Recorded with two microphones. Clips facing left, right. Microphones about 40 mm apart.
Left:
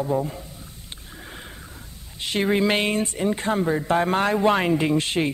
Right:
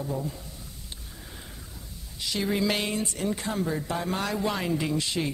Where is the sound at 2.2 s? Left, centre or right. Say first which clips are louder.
Left 6 dB; left.